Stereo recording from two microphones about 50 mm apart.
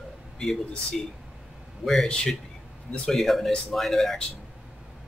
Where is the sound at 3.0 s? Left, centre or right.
Centre.